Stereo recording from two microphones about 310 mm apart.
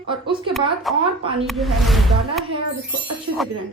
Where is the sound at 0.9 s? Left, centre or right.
Centre.